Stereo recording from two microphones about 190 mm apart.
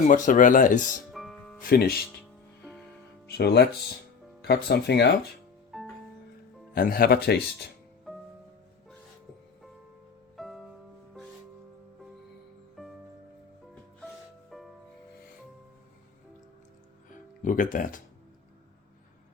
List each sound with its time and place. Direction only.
0.1 s speech: 45° left (ahead or behind)
1.1 s music: centre (ahead or behind)
1.6 s speech: 55° left (ahead or behind)
3.2 s speech: 55° left (ahead or behind)
5.7 s music: centre (ahead or behind)
6.7 s speech: 50° left (ahead or behind)
10.3 s music: centre (ahead or behind)
14.5 s music: 5° left (ahead or behind)
17.4 s speech: 45° left (ahead or behind)